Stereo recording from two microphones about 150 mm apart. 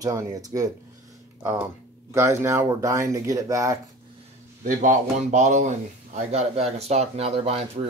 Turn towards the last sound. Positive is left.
turn(degrees=-40)  # may be behind; listen again after turning